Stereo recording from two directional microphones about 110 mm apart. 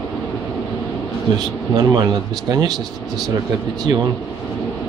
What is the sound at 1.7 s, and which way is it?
Speech, 40° right (ahead or behind).